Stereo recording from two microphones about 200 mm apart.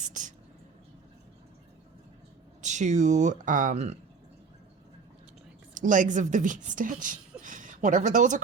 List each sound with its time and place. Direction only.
0.0 s speech: 40° right (ahead or behind)
2.6 s speech: 35° right (ahead or behind)
5.7 s speech: 40° right (ahead or behind)